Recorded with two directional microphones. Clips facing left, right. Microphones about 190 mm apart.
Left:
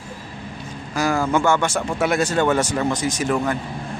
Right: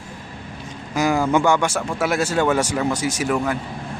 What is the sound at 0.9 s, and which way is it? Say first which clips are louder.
Speech: right 2 dB; 15° right (ahead or behind).